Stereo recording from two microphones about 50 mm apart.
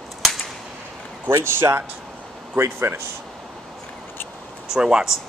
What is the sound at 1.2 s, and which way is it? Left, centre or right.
Speech, right.